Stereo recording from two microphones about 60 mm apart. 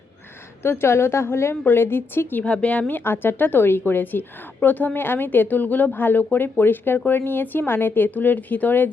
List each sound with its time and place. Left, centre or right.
0.6 s speech: left
2.4 s speech: centre
3.0 s speech: left